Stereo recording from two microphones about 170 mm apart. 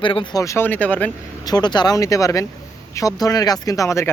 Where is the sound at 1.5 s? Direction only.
25° left (ahead or behind).